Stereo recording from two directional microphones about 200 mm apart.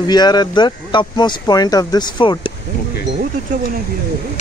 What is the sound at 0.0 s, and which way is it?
Speech, 20° left (ahead or behind).